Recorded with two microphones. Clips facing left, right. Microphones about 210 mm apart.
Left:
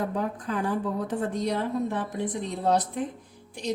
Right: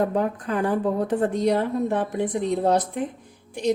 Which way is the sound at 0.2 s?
60° right (ahead or behind).